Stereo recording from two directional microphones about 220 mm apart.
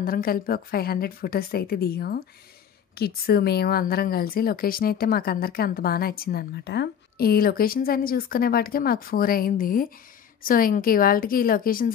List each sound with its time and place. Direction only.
0.0 s a woman's voice: 40° left (ahead or behind)